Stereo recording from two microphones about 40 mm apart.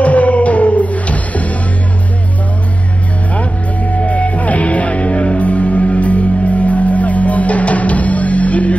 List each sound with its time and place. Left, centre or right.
0.0 s music: left
3.3 s music: left